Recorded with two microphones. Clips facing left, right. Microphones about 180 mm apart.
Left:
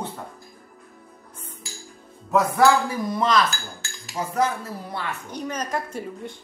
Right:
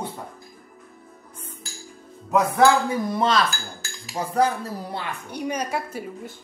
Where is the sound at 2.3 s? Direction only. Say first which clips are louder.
Even; 25° right (ahead or behind).